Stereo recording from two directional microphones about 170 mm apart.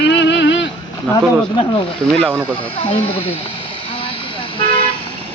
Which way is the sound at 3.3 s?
30° left (ahead or behind).